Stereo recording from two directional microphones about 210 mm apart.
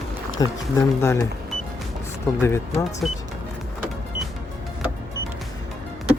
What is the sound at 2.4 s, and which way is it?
Speech, 15° left (ahead or behind).